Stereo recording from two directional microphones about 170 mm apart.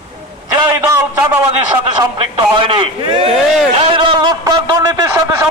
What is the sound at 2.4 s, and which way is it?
Speech, 30° right (ahead or behind).